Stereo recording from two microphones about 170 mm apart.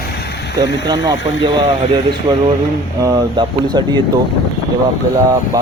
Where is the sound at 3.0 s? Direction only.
25° right (ahead or behind).